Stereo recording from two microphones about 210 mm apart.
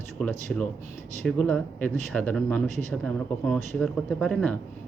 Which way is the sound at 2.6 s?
35° right (ahead or behind).